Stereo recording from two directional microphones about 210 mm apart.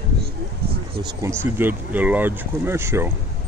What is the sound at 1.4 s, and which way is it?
Speech, 10° right (ahead or behind).